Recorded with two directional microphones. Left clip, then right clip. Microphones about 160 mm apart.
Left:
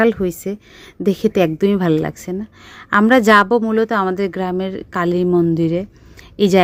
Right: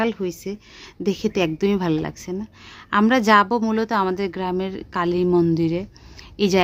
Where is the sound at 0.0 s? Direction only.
35° left (ahead or behind).